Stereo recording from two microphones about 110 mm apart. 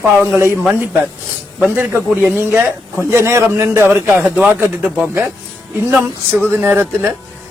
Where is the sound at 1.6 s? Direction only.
10° right (ahead or behind).